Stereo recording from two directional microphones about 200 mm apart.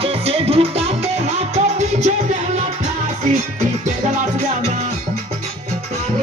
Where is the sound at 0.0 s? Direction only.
30° right (ahead or behind).